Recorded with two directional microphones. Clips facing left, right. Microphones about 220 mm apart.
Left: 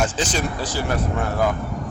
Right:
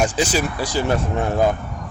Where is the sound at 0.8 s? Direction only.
25° right (ahead or behind).